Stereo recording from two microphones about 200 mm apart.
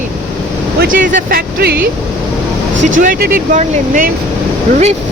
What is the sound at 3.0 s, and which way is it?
Speech, 45° right (ahead or behind).